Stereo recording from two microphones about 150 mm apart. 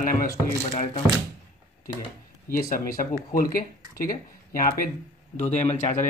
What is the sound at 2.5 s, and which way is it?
Speech, 70° left (ahead or behind).